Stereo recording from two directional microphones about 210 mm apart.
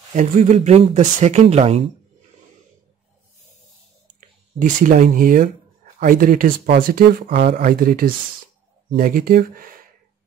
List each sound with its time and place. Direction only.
0.1 s speech: 35° right (ahead or behind)
4.6 s speech: 35° right (ahead or behind)